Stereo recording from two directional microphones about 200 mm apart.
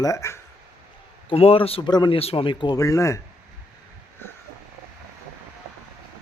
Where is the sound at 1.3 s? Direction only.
30° left (ahead or behind).